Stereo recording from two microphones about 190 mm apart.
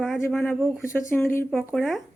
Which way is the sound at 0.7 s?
15° left (ahead or behind).